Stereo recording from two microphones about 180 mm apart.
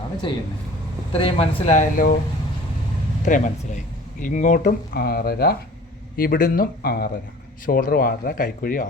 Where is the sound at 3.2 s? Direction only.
45° left (ahead or behind).